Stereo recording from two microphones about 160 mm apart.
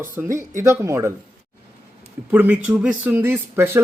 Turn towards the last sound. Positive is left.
turn(degrees=-15)  # may be behind; listen again after turning